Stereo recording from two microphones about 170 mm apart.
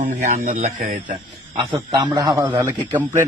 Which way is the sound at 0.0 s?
45° right (ahead or behind).